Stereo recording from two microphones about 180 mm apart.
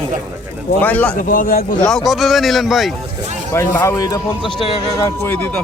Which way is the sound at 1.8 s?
5° left (ahead or behind).